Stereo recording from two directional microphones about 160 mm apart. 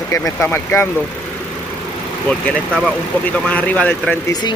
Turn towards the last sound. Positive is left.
turn(degrees=25)  # may be behind; listen again after turning